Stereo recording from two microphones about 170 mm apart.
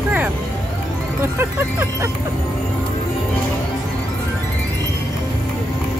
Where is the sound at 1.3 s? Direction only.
15° right (ahead or behind).